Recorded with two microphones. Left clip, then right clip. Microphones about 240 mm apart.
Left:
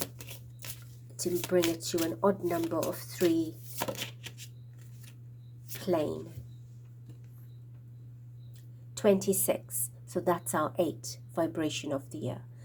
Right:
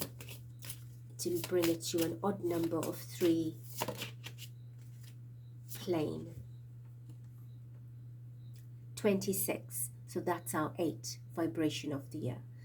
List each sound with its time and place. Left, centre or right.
1.1 s speech: left
5.6 s a sound: left
9.0 s a woman's voice: left